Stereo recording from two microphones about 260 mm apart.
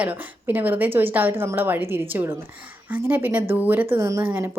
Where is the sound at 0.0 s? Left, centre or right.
Centre.